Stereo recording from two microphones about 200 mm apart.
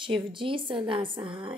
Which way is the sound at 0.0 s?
25° right (ahead or behind).